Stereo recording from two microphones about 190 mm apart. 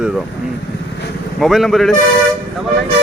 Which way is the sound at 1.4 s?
Centre (ahead or behind).